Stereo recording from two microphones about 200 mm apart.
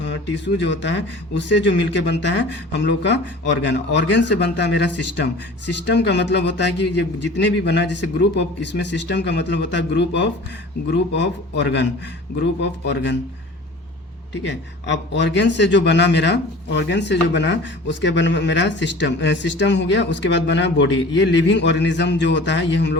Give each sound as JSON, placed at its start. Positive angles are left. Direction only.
{"t": 0.0, "sound": "speech", "side_deg": 60}
{"t": 14.4, "sound": "speech", "side_deg": 60}